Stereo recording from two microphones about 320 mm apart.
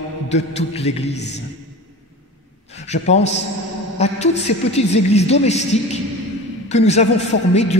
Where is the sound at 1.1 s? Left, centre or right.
Left.